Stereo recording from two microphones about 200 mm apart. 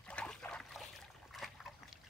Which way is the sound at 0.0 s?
5° left (ahead or behind).